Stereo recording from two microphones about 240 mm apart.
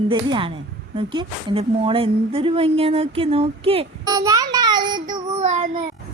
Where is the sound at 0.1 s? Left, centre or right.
Centre.